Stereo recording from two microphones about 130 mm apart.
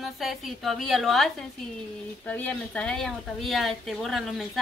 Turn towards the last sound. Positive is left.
turn(degrees=0)  # may be behind; listen again after turning